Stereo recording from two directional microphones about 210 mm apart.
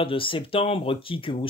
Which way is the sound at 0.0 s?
25° left (ahead or behind).